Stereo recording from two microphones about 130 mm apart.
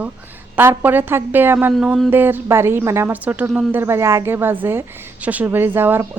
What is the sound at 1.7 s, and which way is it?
Speech, centre (ahead or behind).